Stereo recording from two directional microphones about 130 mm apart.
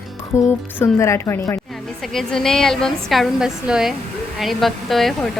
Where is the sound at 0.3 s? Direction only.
20° left (ahead or behind).